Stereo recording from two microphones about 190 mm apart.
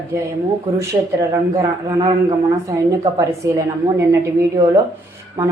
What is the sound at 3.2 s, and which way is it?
Mantra, 15° right (ahead or behind).